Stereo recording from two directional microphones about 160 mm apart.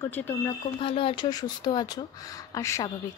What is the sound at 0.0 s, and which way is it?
Speech, 15° left (ahead or behind).